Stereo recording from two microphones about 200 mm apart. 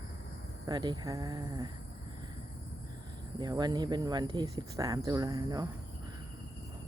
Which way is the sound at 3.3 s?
20° right (ahead or behind).